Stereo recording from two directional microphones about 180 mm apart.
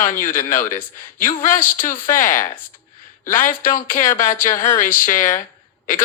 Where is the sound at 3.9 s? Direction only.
45° left (ahead or behind).